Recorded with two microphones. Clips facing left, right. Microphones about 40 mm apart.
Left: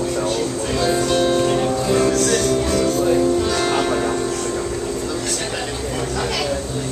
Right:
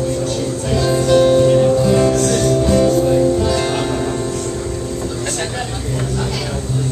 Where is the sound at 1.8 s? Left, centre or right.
Centre.